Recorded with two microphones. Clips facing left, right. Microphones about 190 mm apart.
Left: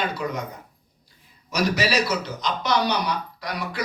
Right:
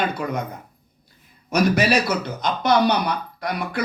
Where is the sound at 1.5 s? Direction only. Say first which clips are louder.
Right 5 dB; 55° right (ahead or behind).